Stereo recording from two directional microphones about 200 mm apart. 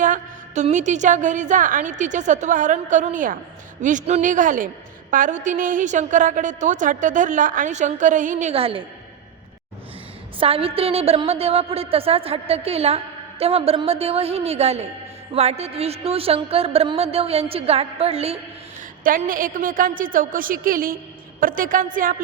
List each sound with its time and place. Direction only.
0.0 s a woman's voice: 40° right (ahead or behind)
10.4 s a woman's voice: 30° right (ahead or behind)
19.0 s a woman's voice: 45° right (ahead or behind)